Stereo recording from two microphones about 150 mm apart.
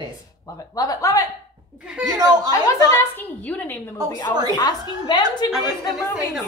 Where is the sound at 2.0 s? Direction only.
25° right (ahead or behind).